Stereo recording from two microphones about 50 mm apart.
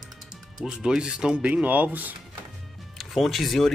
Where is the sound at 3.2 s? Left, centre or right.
Centre.